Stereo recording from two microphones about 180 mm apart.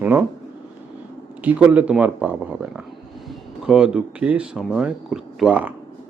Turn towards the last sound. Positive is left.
turn(degrees=-10)  # may be behind; listen again after turning